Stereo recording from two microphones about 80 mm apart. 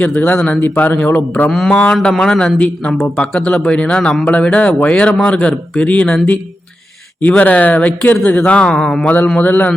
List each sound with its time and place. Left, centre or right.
0.0 s a man's voice: left
1.5 s speech: centre
7.2 s speech: centre
9.0 s a man's voice: left